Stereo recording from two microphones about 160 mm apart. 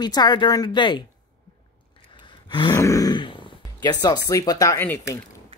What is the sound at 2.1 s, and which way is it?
Gasp, 30° left (ahead or behind).